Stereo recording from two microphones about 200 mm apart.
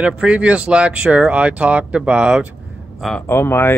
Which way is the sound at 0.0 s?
5° right (ahead or behind).